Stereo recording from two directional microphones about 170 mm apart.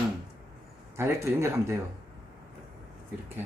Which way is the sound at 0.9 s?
15° right (ahead or behind).